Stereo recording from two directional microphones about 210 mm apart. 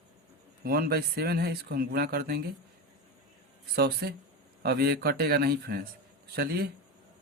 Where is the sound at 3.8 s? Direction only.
50° right (ahead or behind).